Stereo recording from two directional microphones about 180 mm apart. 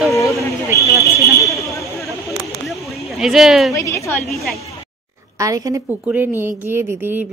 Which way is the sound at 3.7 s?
15° left (ahead or behind).